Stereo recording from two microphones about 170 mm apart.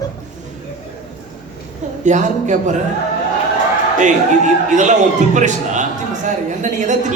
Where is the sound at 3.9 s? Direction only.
45° right (ahead or behind).